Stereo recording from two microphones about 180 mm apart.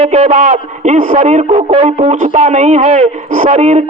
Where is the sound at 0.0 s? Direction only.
35° right (ahead or behind).